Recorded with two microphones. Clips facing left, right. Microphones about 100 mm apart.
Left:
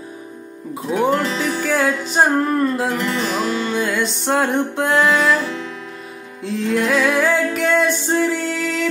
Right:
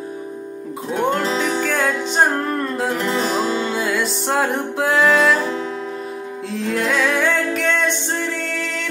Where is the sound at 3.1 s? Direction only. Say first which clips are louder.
Right 1 dB; 35° right (ahead or behind).